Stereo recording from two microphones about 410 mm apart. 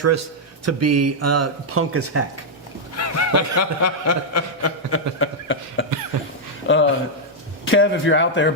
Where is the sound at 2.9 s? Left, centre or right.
Left.